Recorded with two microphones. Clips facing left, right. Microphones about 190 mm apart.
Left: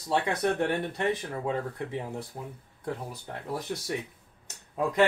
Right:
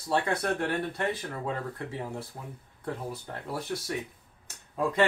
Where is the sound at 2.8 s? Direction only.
15° left (ahead or behind).